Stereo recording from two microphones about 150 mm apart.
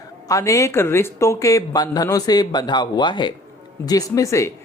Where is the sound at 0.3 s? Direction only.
20° left (ahead or behind).